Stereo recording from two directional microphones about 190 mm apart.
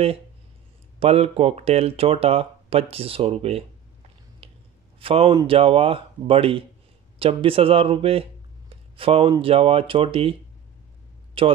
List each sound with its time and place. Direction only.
0.9 s speech: 30° right (ahead or behind)
4.4 s squish: 30° right (ahead or behind)
4.9 s a man's voice: 30° right (ahead or behind)
11.4 s speech: 30° right (ahead or behind)